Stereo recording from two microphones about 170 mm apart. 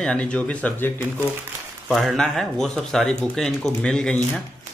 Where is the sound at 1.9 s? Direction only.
Centre (ahead or behind).